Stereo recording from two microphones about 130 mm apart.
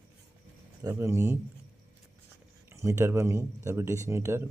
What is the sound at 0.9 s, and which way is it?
Speech, 20° right (ahead or behind).